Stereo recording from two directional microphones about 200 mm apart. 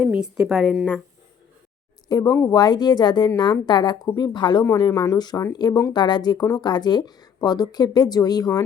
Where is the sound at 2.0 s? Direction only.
20° left (ahead or behind).